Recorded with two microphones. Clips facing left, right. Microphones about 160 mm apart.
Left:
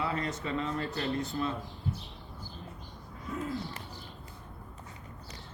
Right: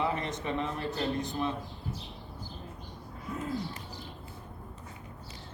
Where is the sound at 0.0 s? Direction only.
20° right (ahead or behind).